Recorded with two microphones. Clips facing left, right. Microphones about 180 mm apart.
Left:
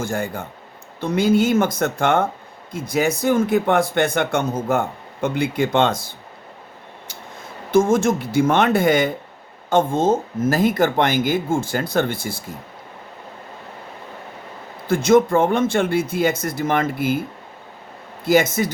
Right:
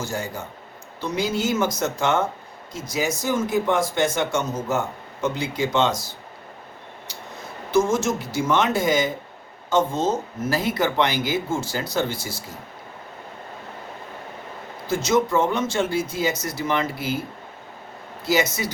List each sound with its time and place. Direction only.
0.0 s speech: 55° left (ahead or behind)
7.7 s speech: 55° left (ahead or behind)
14.8 s speech: 55° left (ahead or behind)
18.3 s speech: 50° left (ahead or behind)